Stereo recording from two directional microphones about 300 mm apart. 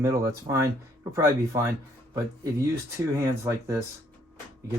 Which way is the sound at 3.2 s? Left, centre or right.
Centre.